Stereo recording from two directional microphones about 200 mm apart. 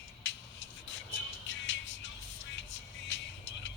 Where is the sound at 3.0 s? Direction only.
60° left (ahead or behind).